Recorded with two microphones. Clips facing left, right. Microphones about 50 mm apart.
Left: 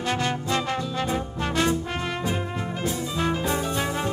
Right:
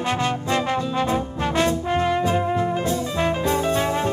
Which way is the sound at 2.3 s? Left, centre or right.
Right.